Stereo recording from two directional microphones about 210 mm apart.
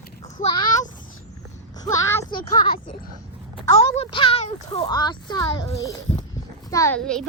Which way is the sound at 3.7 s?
30° left (ahead or behind).